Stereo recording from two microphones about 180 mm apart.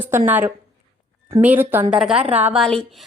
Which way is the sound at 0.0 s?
10° right (ahead or behind).